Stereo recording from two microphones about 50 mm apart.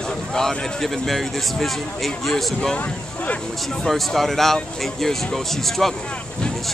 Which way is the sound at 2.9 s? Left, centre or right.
Left.